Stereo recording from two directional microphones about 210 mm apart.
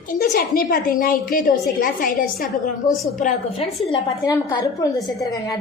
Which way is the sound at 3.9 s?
20° left (ahead or behind).